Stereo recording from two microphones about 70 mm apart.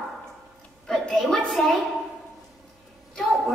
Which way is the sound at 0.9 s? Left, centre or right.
Centre.